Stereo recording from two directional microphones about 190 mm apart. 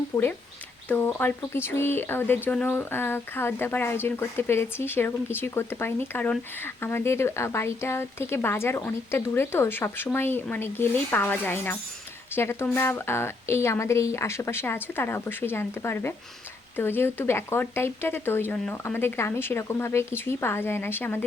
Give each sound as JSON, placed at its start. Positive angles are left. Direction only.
{"t": 0.1, "sound": "speech", "side_deg": 15}